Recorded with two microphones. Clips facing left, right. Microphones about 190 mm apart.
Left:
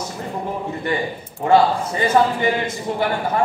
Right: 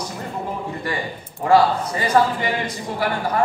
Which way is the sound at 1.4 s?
25° left (ahead or behind).